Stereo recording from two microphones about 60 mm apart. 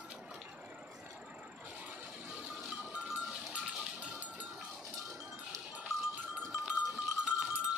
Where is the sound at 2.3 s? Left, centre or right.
Centre.